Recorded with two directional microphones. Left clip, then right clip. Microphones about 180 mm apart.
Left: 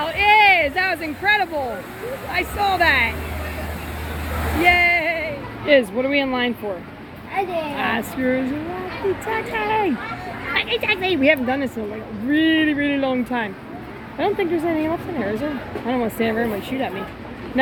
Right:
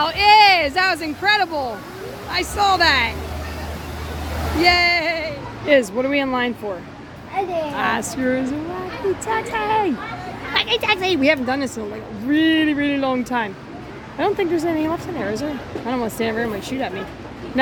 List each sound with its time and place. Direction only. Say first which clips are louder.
0.0 s a sound: right 2 dB; 20° right (ahead or behind)
2.3 s speech: right 3 dB; 15° right (ahead or behind)
4.6 s music: even; 15° right (ahead or behind)
6.0 s speech: even; 10° right (ahead or behind)
7.8 s speech: right 2 dB; 10° right (ahead or behind)
9.2 s speech: right 1 dB; centre (ahead or behind)
10.5 s speech: right 2 dB; 20° right (ahead or behind); by 16.9 s centre (ahead or behind)